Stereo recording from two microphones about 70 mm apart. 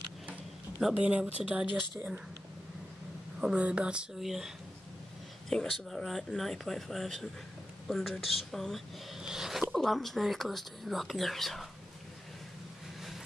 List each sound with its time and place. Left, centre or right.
0.9 s speech: centre
3.3 s speech: centre
4.2 s speech: centre
5.5 s speech: centre
9.2 s a sound: centre
9.7 s speech: centre